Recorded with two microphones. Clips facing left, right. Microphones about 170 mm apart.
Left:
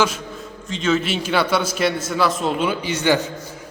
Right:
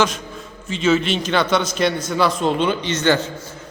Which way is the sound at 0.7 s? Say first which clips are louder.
Right 3 dB; 5° right (ahead or behind).